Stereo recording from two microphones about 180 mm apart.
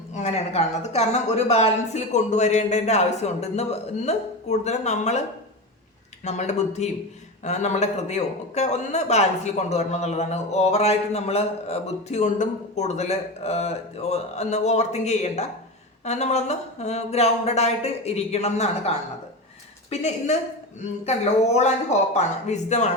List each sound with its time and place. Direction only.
0.1 s a man's voice: 40° left (ahead or behind)
6.2 s a man's voice: 40° left (ahead or behind)